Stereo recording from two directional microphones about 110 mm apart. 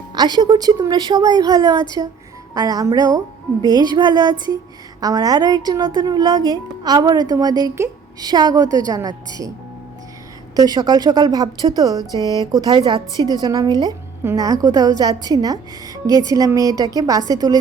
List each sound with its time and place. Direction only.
0.1 s a woman's voice: 40° right (ahead or behind)
10.5 s a woman's voice: 35° right (ahead or behind)